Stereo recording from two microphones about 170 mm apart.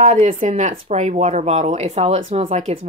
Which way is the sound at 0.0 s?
40° right (ahead or behind).